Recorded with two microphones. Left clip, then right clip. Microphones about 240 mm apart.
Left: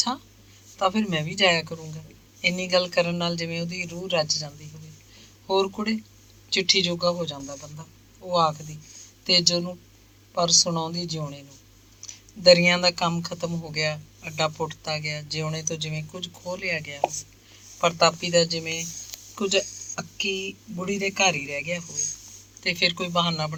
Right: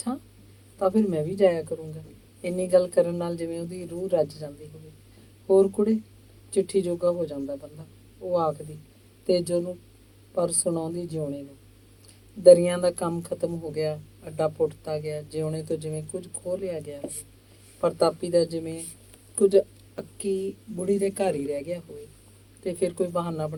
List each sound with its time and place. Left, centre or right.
0.8 s speech: left
5.5 s speech: left
9.2 s speech: left
12.4 s speech: left